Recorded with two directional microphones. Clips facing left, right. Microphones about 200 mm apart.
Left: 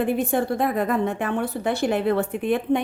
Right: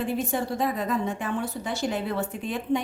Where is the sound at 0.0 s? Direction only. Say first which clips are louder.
Left 5 dB; 55° left (ahead or behind).